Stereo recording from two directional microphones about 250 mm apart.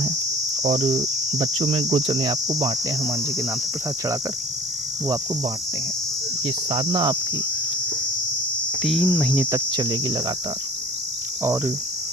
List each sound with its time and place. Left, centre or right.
0.6 s cricket: right
6.7 s cricket: centre
8.8 s cricket: centre
9.3 s cricket: centre
9.7 s cricket: centre
11.4 s cricket: centre